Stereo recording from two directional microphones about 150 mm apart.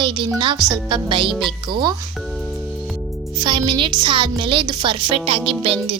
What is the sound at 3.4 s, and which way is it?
A woman's voice, 30° right (ahead or behind).